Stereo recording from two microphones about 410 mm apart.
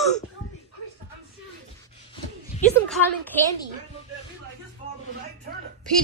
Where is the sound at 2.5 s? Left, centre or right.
Centre.